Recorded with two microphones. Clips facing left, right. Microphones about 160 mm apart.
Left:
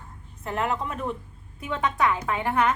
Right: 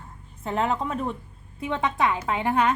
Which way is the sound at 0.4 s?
25° right (ahead or behind).